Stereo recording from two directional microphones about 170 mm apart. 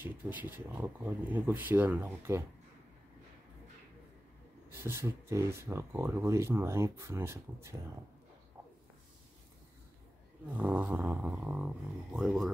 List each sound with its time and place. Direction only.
0.0 s speech: 10° right (ahead or behind)
4.7 s speech: 15° right (ahead or behind)
10.5 s speech: 10° right (ahead or behind)